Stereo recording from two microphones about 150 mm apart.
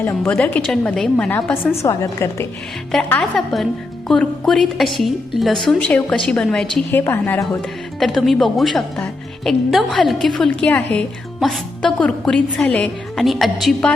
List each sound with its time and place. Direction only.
0.2 s a woman's voice: 10° left (ahead or behind)
2.9 s a woman's voice: 10° left (ahead or behind)
7.0 s a woman's voice: 15° left (ahead or behind)
7.9 s a woman's voice: centre (ahead or behind)
11.3 s a woman's voice: centre (ahead or behind)